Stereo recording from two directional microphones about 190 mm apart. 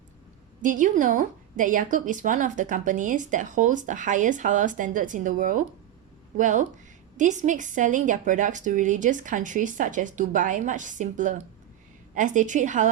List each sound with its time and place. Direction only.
0.6 s a woman's voice: 40° right (ahead or behind)